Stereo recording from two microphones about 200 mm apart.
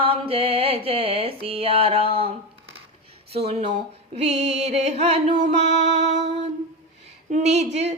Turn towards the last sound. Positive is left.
turn(degrees=-35)  # may be behind; listen again after turning